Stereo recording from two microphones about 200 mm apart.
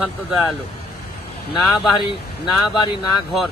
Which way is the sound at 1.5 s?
Centre (ahead or behind).